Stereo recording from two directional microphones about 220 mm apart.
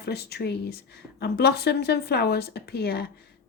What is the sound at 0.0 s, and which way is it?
A woman's voice, 45° left (ahead or behind).